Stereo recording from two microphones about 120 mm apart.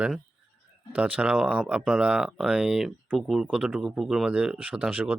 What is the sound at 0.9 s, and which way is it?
Speech, 10° right (ahead or behind).